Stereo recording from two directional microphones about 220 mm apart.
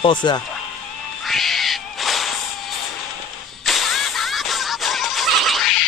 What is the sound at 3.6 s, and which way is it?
Music, centre (ahead or behind).